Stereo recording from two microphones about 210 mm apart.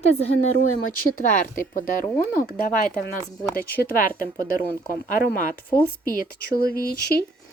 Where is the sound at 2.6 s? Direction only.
40° left (ahead or behind).